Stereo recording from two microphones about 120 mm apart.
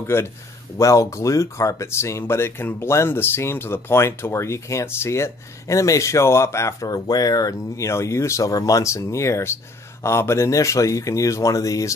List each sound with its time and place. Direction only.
0.0 s speech: 20° left (ahead or behind)